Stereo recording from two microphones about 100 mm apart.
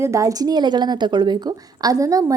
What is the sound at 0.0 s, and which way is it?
A woman's voice, 30° right (ahead or behind).